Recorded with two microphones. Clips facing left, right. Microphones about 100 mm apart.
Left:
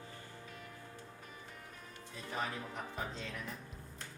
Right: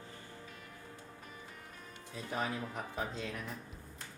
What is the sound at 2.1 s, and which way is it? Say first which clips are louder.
Music: right 3 dB; 5° right (ahead or behind).